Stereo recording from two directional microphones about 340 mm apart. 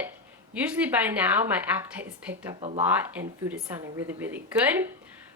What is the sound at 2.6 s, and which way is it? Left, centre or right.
Speech, centre.